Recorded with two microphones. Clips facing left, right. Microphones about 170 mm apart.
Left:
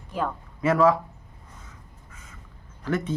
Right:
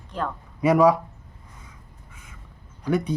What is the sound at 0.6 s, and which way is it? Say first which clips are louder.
Speech: right 3 dB; 15° right (ahead or behind).